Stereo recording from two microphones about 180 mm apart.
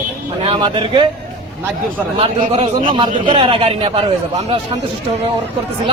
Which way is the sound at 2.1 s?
30° right (ahead or behind).